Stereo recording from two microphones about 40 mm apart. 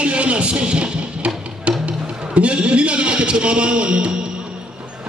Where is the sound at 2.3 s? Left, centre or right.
Right.